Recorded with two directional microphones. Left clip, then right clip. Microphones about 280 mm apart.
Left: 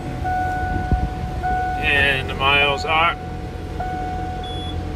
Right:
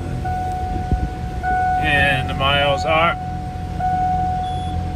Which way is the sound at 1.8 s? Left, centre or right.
Centre.